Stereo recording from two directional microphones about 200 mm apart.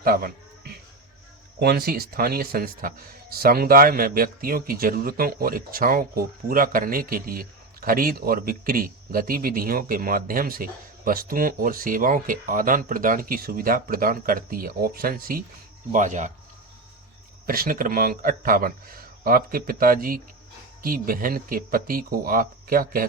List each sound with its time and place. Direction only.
0.0 s a sound: 50° right (ahead or behind)
1.5 s speech: 50° right (ahead or behind)
17.4 s speech: 45° right (ahead or behind)